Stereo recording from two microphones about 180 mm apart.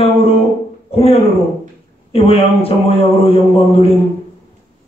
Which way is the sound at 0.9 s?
35° left (ahead or behind).